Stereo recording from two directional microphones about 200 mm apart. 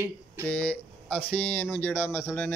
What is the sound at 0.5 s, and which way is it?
Speech, 5° left (ahead or behind).